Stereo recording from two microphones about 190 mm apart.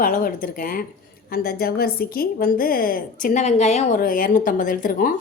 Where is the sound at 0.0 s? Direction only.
50° left (ahead or behind).